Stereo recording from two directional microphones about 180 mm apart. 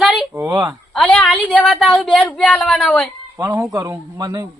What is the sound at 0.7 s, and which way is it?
A woman's voice, 5° left (ahead or behind).